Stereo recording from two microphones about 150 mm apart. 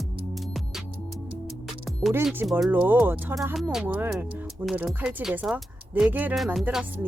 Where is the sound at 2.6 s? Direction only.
10° right (ahead or behind).